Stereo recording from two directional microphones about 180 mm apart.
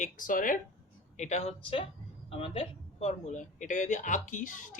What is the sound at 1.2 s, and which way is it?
A woman's voice, 40° left (ahead or behind).